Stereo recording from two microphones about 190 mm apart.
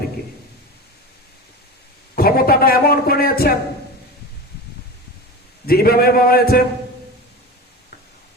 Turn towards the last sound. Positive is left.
turn(degrees=55)  # may be behind; listen again after turning